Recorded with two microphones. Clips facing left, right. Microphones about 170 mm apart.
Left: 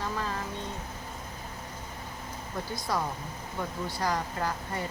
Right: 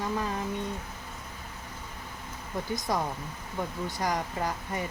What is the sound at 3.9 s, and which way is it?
Speech, 20° right (ahead or behind).